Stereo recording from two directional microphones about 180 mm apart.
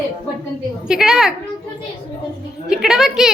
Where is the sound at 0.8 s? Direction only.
5° right (ahead or behind).